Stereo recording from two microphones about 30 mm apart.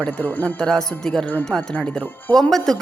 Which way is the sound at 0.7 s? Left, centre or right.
Centre.